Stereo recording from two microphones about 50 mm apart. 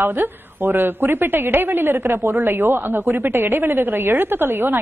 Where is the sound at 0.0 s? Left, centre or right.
Right.